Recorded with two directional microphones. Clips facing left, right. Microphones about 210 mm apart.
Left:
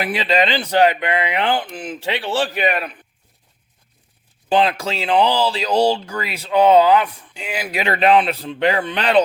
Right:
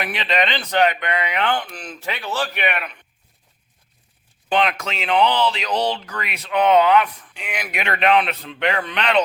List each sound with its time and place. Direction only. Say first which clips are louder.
0.0 s speech: left 4 dB; 30° left (ahead or behind)
4.4 s speech: left 3 dB; 30° left (ahead or behind)